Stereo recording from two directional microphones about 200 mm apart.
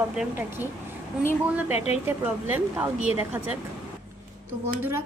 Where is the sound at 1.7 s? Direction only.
30° left (ahead or behind).